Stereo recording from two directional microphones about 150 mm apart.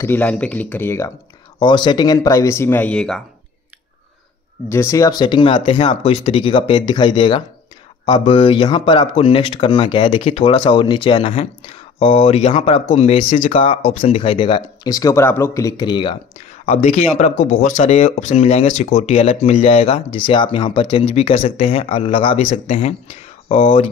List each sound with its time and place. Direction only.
0.0 s speech: 10° left (ahead or behind)
1.6 s speech: 30° left (ahead or behind); by 3.2 s 5° left (ahead or behind)
4.6 s speech: 20° left (ahead or behind)
10.2 s speech: 40° left (ahead or behind)
16.3 s speech: 45° left (ahead or behind)